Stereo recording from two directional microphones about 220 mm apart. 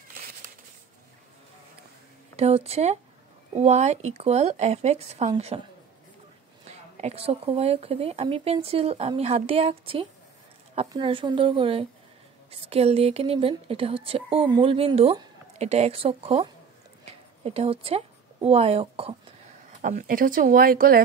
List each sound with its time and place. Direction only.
2.3 s speech: 30° right (ahead or behind)
6.7 s a woman's voice: 30° right (ahead or behind)
19.8 s speech: 40° right (ahead or behind)